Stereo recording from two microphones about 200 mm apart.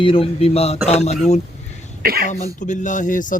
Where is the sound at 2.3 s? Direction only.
35° left (ahead or behind).